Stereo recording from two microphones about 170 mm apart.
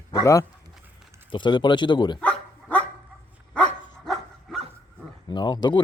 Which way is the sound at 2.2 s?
10° left (ahead or behind).